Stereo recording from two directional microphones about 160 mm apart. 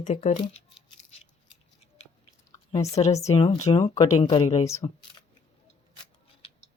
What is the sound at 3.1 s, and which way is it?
Speech, 40° left (ahead or behind).